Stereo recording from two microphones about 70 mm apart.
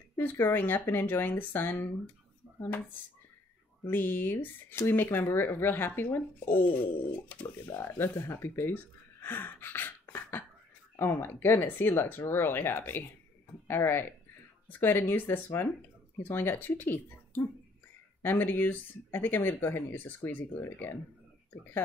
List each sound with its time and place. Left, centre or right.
0.2 s speech: left
3.8 s speech: left